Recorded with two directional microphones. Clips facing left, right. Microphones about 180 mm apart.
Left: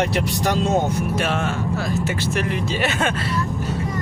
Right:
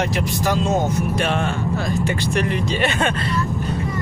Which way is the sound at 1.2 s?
5° left (ahead or behind).